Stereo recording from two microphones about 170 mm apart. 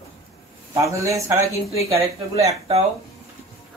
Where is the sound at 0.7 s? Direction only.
20° right (ahead or behind).